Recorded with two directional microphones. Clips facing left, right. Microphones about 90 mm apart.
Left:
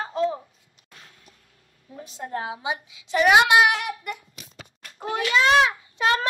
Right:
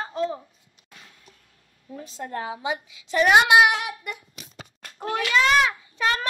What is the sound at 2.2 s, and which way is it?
A woman's voice, 20° left (ahead or behind).